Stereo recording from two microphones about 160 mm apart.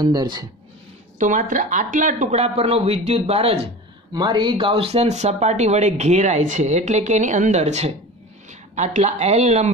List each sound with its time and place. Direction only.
0.0 s speech: 25° right (ahead or behind)
1.1 s speech: 50° right (ahead or behind)
4.1 s speech: 30° right (ahead or behind); by 9.7 s 45° right (ahead or behind)